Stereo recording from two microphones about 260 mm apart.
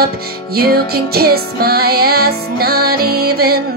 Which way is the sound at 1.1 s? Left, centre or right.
Right.